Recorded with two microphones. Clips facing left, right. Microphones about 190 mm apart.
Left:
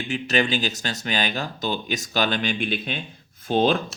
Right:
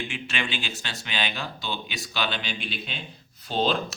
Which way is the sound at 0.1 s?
40° left (ahead or behind).